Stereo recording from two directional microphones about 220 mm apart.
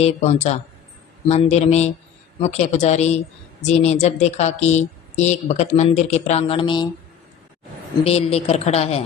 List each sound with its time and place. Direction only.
0.0 s a woman's voice: 30° left (ahead or behind)
8.0 s a woman's voice: 25° left (ahead or behind)